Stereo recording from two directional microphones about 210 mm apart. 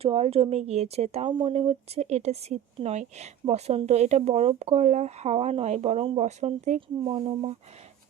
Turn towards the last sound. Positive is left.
turn(degrees=-25)  # may be behind; listen again after turning